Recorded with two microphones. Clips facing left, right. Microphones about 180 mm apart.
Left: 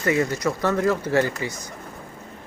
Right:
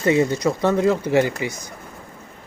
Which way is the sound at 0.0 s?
25° right (ahead or behind).